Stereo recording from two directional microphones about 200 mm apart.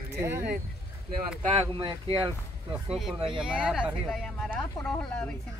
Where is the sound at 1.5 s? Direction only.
30° right (ahead or behind).